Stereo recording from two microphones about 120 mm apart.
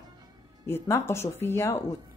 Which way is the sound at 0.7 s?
20° left (ahead or behind).